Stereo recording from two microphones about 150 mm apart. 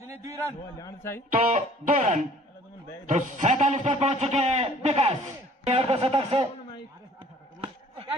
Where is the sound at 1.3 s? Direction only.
55° right (ahead or behind).